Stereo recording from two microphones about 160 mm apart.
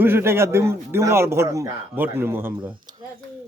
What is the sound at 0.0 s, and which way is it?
A man's voice, 15° right (ahead or behind).